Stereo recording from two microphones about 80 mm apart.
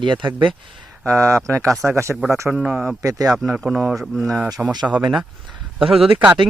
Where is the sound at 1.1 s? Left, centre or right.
Right.